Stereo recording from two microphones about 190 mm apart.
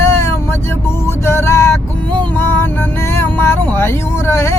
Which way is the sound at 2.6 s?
10° left (ahead or behind).